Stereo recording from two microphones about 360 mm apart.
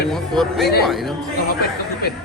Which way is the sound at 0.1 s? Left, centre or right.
Centre.